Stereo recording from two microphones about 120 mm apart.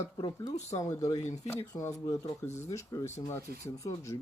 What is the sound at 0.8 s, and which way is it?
Speech, 25° left (ahead or behind).